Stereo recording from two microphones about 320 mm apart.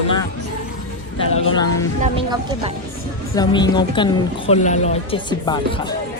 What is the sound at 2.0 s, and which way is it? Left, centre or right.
Speech, centre.